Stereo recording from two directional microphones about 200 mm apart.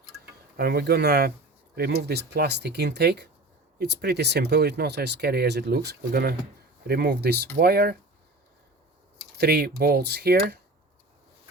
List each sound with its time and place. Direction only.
0.5 s speech: 50° right (ahead or behind)
9.4 s speech: 55° right (ahead or behind)